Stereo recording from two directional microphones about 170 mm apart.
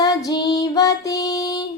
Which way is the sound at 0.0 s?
20° left (ahead or behind).